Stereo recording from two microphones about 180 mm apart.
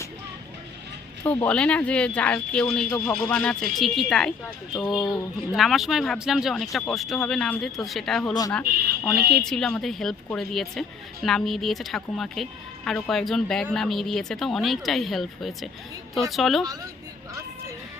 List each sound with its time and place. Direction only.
1.2 s a woman's voice: 10° left (ahead or behind)
8.3 s speech: 20° left (ahead or behind)
9.2 s a woman's voice: 5° left (ahead or behind)